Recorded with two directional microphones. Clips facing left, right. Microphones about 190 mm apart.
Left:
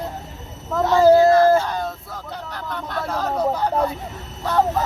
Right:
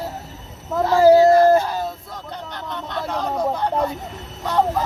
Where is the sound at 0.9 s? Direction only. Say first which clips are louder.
Right 1 dB; 10° right (ahead or behind).